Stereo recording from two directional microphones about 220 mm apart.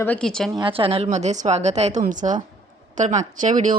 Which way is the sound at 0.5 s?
25° right (ahead or behind).